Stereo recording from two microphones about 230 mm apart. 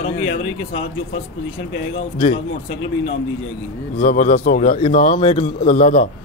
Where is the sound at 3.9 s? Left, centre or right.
Left.